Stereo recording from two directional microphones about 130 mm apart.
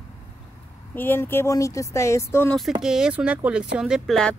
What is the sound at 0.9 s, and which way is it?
Speech, 15° left (ahead or behind).